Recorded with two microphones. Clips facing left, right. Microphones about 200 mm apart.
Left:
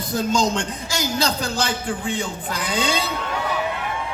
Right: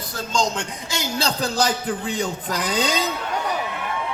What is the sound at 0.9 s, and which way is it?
A man's voice, 25° right (ahead or behind).